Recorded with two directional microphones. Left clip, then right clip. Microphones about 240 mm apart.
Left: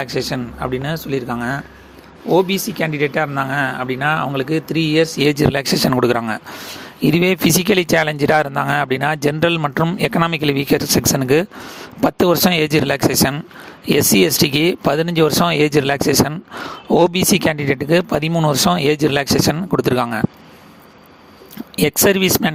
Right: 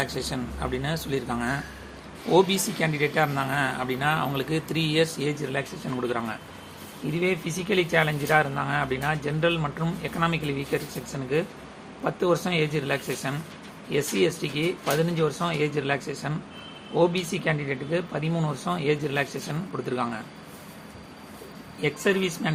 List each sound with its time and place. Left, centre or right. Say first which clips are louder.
0.0 s speech: left 8 dB; left
5.2 s speech: left 13 dB; left
21.8 s speech: left 10 dB; left